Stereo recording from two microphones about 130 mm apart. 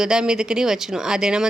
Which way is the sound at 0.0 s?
5° right (ahead or behind).